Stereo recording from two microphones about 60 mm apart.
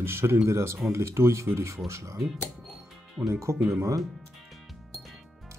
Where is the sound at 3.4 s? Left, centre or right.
Right.